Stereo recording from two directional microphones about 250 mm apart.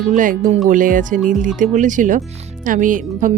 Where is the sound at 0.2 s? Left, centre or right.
Right.